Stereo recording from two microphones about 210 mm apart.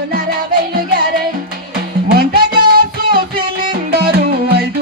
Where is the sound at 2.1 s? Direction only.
45° right (ahead or behind).